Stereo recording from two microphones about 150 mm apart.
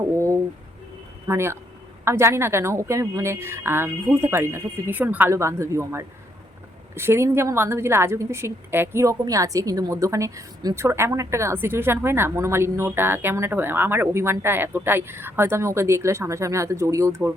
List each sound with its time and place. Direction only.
0.1 s a woman's voice: 20° right (ahead or behind)